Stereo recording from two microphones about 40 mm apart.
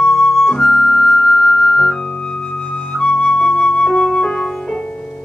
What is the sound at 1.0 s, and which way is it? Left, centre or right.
Flute, left.